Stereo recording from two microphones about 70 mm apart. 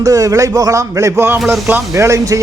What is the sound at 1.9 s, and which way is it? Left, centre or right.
Speech, right.